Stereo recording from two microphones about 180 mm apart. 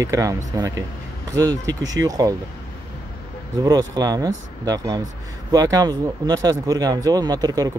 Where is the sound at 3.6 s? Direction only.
20° right (ahead or behind).